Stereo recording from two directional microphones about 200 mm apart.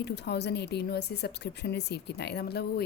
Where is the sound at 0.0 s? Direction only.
55° left (ahead or behind).